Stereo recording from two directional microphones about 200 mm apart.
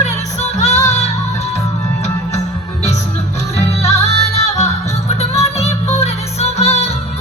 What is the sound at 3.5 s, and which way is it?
Music, 30° left (ahead or behind).